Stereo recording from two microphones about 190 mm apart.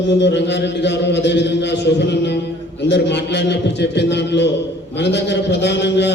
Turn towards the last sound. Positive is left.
turn(degrees=65)  # may be behind; listen again after turning